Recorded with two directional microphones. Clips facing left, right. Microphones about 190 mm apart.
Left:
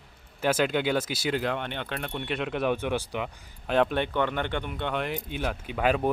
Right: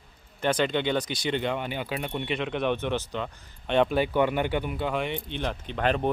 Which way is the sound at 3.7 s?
Centre (ahead or behind).